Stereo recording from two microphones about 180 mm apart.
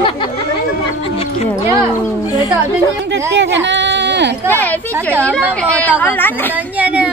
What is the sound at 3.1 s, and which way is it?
Speech, 80° right.